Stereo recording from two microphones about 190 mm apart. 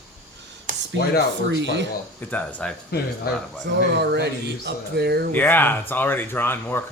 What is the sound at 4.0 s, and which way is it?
Speech, 60° right (ahead or behind).